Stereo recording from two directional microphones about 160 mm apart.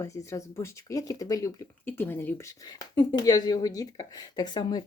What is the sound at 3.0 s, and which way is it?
Speech, 25° left (ahead or behind).